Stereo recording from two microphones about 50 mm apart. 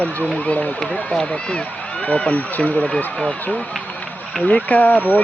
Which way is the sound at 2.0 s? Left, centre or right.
Left.